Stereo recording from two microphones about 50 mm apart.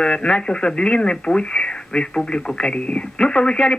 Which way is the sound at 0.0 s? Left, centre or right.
Centre.